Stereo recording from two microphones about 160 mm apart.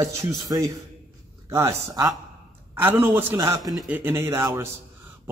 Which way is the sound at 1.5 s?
15° right (ahead or behind).